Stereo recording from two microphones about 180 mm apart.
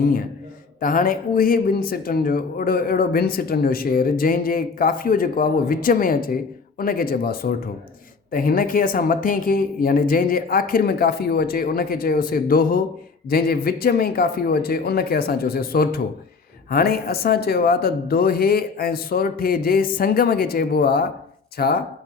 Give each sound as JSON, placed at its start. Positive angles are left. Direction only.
{"t": 0.0, "sound": "speech", "side_deg": 50}